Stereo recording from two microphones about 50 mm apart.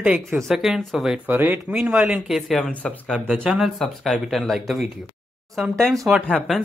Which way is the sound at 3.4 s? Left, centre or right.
Centre.